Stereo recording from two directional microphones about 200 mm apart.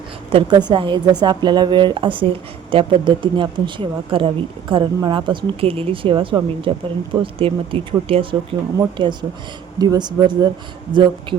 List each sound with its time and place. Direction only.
0.3 s speech: 25° right (ahead or behind)